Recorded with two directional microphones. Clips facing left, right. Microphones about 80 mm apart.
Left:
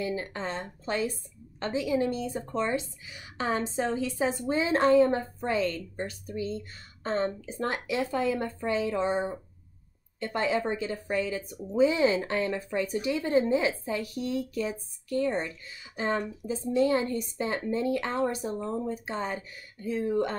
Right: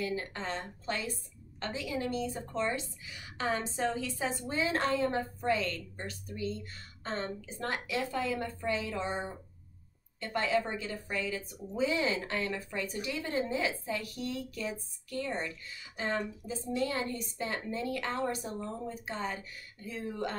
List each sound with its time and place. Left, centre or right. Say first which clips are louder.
0.0 s a woman's voice: left 3 dB; left
10.3 s a woman's voice: left 3 dB; left